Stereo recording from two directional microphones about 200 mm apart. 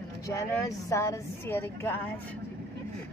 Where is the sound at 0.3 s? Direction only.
15° left (ahead or behind).